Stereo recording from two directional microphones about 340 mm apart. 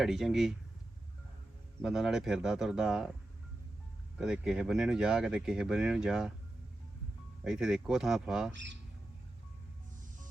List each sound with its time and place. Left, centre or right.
0.0 s speech: centre
1.8 s speech: centre
4.2 s speech: centre
7.4 s speech: centre
8.5 s speech: right